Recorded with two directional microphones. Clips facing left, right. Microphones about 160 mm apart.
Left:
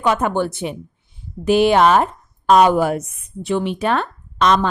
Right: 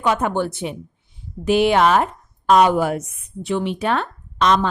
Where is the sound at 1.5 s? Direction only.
40° left (ahead or behind).